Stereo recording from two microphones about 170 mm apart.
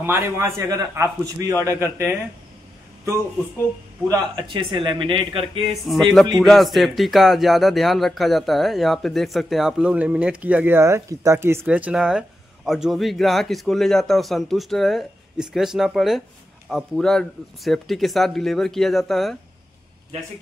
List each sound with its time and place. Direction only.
0.0 s a man's voice: 15° right (ahead or behind)
4.1 s speech: 25° right (ahead or behind)
6.4 s speech: centre (ahead or behind)